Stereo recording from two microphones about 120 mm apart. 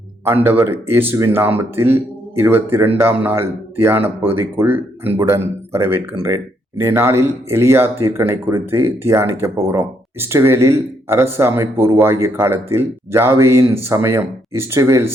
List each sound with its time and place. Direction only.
0.6 s speech: 20° right (ahead or behind)